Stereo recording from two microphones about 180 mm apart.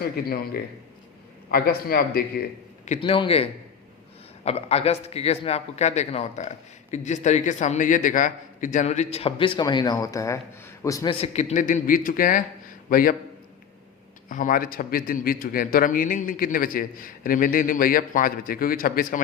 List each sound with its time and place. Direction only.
0.0 s a man's voice: 55° left (ahead or behind)
3.0 s a man's voice: 30° left (ahead or behind)
11.1 s a man's voice: 35° left (ahead or behind); by 13.1 s 50° left (ahead or behind)
14.3 s a man's voice: 50° left (ahead or behind)